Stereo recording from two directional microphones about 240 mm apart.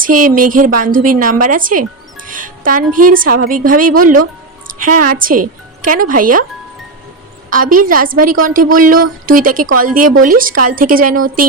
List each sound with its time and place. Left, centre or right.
0.0 s a woman's voice: right
7.5 s a woman's voice: right